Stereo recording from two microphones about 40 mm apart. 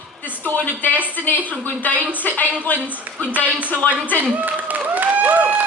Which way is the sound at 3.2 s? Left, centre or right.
Right.